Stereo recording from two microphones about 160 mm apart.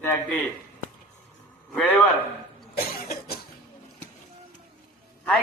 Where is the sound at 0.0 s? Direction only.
10° left (ahead or behind).